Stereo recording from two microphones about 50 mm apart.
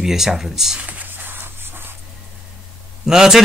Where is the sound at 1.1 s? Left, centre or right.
Right.